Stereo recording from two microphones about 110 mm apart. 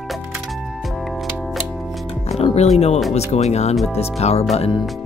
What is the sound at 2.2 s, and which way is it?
Music, 75° left (ahead or behind).